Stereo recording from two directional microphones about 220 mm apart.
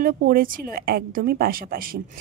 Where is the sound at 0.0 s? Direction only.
40° right (ahead or behind).